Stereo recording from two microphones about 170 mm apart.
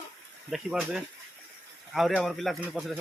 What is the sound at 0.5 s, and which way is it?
Speech, 5° right (ahead or behind).